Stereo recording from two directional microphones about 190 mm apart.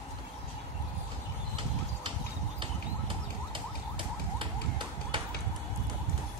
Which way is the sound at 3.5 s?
25° right (ahead or behind).